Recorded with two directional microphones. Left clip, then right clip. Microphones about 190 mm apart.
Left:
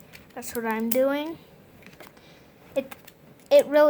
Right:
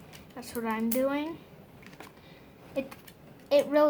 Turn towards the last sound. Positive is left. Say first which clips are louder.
# left 6 dB
turn(degrees=40)  # may be behind; listen again after turning